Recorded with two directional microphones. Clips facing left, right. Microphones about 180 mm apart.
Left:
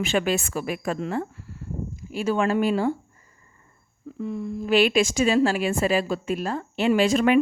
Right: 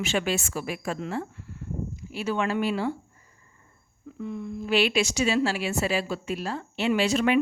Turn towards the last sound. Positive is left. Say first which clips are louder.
# left 4 dB
turn(degrees=50)  # may be behind; listen again after turning